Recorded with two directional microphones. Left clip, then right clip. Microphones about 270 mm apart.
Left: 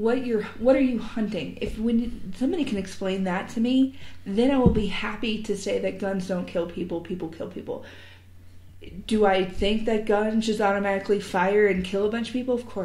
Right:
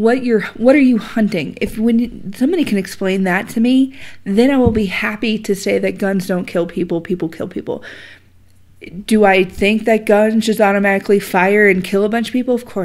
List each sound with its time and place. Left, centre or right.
0.0 s speech: right
9.1 s speech: right